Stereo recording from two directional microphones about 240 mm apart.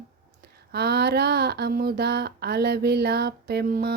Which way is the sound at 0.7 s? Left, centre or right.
Right.